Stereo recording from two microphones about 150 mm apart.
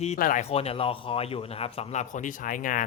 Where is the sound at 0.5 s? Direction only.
40° left (ahead or behind); by 2.8 s 65° left (ahead or behind).